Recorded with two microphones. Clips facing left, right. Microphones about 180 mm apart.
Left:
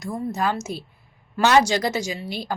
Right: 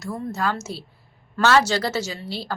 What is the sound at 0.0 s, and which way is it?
A woman's voice, 15° left (ahead or behind).